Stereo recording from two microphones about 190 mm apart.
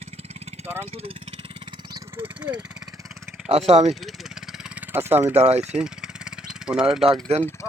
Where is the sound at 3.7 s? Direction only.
35° right (ahead or behind).